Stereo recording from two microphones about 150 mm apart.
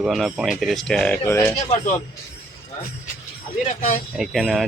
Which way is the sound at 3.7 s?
55° left (ahead or behind).